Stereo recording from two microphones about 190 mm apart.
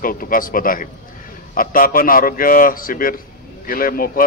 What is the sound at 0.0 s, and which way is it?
Speech, 50° left (ahead or behind).